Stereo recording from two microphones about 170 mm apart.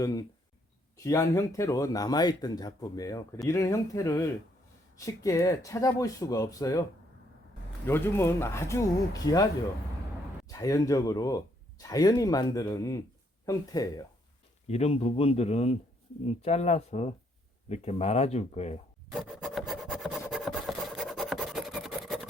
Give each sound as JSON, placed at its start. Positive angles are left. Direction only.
{"t": 0.0, "sound": "speech", "side_deg": 20}
{"t": 7.9, "sound": "speech", "side_deg": 15}
{"t": 10.5, "sound": "speech", "side_deg": 20}
{"t": 14.7, "sound": "speech", "side_deg": 40}
{"t": 19.1, "sound": "rub", "side_deg": 0}
{"t": 20.3, "sound": "filing", "side_deg": 0}